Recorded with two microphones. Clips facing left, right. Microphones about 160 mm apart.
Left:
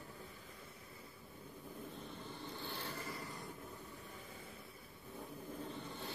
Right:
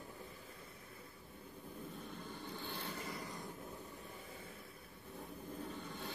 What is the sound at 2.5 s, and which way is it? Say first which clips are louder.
Vehicle: even; 15° right (ahead or behind).